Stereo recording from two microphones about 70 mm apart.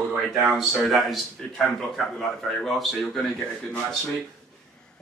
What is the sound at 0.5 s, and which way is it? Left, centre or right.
A man's voice, centre.